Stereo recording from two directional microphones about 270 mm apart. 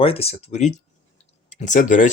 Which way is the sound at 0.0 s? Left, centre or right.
Left.